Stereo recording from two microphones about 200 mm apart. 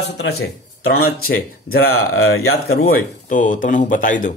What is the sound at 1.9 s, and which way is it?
Speech, 90° left.